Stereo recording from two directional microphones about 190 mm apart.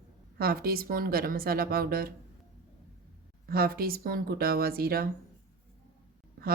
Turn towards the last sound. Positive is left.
turn(degrees=-50)  # may be behind; listen again after turning